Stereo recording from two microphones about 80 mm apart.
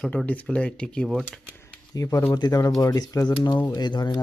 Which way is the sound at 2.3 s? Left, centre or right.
Left.